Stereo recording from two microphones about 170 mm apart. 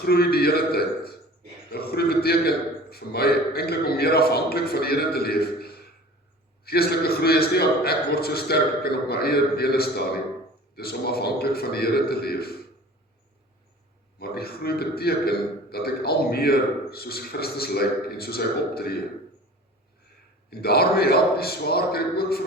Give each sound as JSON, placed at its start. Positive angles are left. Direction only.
{"t": 0.0, "sound": "a man's voice", "side_deg": 65}
{"t": 14.2, "sound": "a man's voice", "side_deg": 65}
{"t": 20.5, "sound": "a man's voice", "side_deg": 65}